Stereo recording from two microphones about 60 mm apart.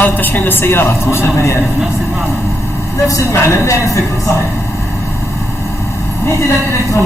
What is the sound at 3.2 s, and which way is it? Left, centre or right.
Speech, left.